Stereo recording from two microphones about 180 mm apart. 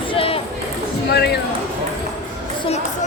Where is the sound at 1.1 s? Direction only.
65° left (ahead or behind).